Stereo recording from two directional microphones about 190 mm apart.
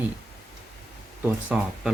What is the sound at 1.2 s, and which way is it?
Speech, 10° right (ahead or behind).